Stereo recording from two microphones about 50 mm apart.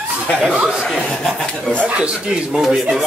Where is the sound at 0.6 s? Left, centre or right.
Centre.